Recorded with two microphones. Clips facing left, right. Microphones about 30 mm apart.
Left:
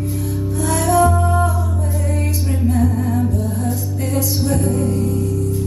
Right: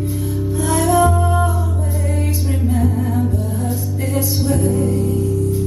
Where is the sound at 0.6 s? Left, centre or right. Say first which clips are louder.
Even; centre.